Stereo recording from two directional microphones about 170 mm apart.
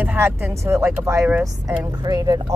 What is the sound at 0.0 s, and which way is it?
Speech, 10° right (ahead or behind).